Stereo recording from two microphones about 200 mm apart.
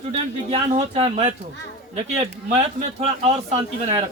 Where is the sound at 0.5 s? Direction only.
30° right (ahead or behind).